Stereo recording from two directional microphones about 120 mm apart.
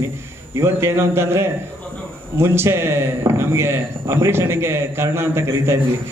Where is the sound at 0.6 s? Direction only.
20° right (ahead or behind).